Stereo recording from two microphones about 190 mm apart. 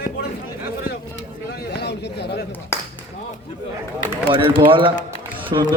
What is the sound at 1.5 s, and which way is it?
Speech, 55° left (ahead or behind).